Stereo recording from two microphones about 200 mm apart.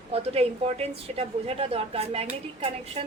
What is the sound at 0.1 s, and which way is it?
A woman's voice, 30° right (ahead or behind).